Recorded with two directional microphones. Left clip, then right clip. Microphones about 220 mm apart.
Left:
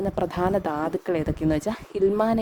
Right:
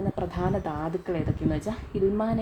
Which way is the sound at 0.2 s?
35° left (ahead or behind).